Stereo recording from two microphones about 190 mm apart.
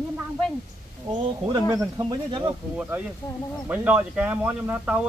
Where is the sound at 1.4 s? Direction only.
20° right (ahead or behind).